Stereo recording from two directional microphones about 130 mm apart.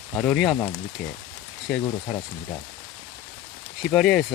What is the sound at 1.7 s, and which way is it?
Speech, 5° left (ahead or behind).